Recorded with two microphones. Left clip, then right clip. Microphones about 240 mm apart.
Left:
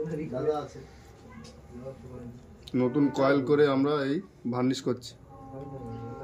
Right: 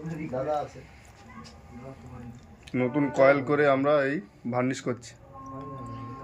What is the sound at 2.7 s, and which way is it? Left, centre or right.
Speech, centre.